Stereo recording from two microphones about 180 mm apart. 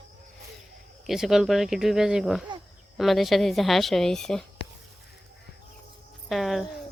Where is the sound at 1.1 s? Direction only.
Centre (ahead or behind).